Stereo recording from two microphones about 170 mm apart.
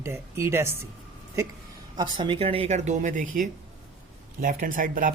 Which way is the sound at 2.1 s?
30° right (ahead or behind).